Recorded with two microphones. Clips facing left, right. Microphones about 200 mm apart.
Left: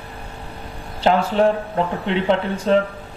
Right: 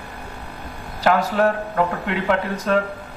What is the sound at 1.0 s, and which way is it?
A man's voice, 25° left (ahead or behind).